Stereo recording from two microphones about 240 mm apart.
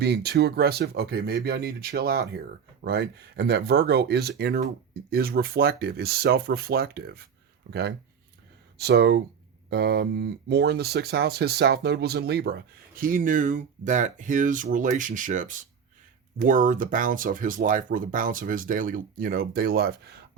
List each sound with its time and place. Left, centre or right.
0.0 s speech: right